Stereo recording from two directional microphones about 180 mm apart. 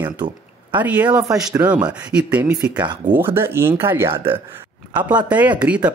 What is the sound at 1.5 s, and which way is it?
Speech, 5° right (ahead or behind).